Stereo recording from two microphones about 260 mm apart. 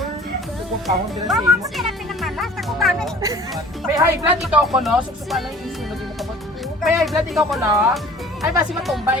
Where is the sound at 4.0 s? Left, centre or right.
Centre.